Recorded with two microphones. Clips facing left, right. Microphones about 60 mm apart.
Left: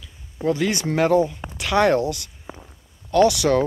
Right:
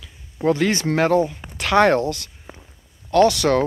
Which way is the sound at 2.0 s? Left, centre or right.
Centre.